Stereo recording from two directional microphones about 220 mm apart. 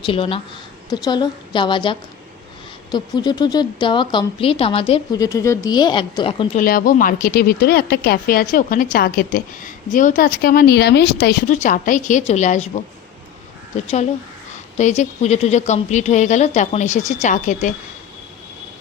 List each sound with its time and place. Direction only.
0.0 s a woman's voice: 25° left (ahead or behind)
6.6 s speech: 40° left (ahead or behind)